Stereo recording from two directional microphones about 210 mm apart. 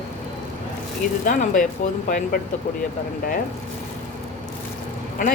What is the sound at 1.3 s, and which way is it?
Speech, 40° left (ahead or behind).